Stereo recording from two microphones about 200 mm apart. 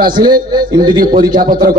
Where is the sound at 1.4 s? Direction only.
45° right (ahead or behind).